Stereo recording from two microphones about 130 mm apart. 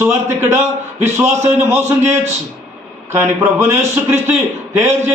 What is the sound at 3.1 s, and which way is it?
A man's voice, 20° right (ahead or behind).